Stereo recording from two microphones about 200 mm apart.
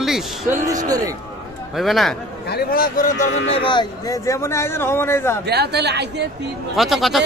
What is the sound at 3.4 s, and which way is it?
Speech, 25° left (ahead or behind).